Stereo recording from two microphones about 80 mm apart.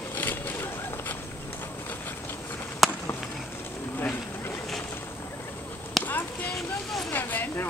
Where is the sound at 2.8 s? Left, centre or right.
Centre.